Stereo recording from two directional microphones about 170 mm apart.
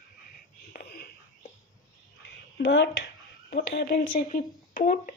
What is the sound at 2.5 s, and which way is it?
Speech, 90° left.